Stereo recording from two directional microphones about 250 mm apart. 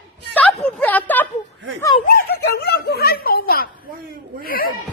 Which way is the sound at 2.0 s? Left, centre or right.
Left.